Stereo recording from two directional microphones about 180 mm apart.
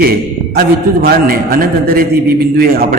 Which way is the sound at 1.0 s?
55° right (ahead or behind).